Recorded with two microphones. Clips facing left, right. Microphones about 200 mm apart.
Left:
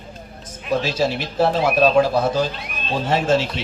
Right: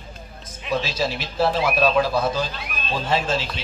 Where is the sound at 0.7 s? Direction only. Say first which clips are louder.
Left 4 dB; 55° left (ahead or behind).